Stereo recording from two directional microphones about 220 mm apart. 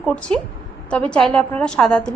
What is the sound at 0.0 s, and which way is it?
A woman's voice, 5° left (ahead or behind).